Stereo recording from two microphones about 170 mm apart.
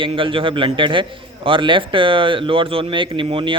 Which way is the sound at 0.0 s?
30° right (ahead or behind).